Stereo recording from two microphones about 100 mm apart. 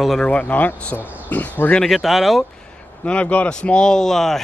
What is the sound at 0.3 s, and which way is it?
Speech, 15° left (ahead or behind).